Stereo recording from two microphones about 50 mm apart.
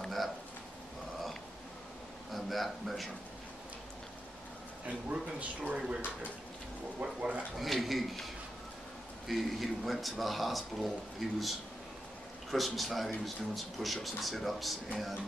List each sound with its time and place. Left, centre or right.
0.0 s a sound: centre
2.3 s a man's voice: centre
4.8 s speech: right
7.0 s speech: right
7.5 s a man's voice: centre
9.3 s a man's voice: centre